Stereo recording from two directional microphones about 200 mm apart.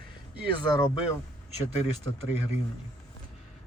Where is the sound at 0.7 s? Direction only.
20° left (ahead or behind).